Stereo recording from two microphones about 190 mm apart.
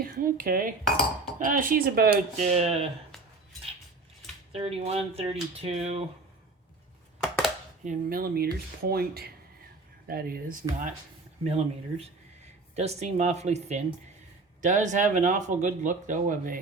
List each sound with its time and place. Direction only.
0.0 s speech: 50° right (ahead or behind)
0.9 s cutlery: 5° left (ahead or behind)
1.4 s speech: 45° right (ahead or behind)
2.5 s speech: 35° right (ahead or behind)
4.5 s speech: 30° right (ahead or behind)
7.9 s speech: 50° right (ahead or behind)
11.4 s speech: 35° right (ahead or behind)